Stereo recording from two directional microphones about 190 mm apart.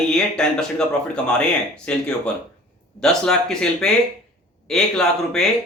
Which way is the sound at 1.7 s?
5° left (ahead or behind).